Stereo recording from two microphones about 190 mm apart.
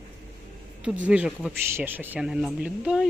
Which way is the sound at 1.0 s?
5° right (ahead or behind).